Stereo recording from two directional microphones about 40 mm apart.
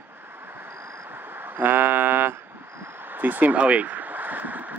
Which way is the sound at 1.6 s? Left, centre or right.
Right.